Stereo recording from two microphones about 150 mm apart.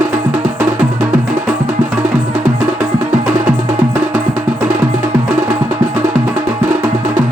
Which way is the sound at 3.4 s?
60° right (ahead or behind).